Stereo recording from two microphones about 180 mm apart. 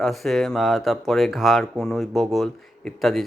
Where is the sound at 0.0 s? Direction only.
Centre (ahead or behind).